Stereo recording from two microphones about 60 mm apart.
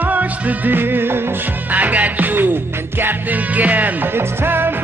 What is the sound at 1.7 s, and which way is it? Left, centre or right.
Music, right.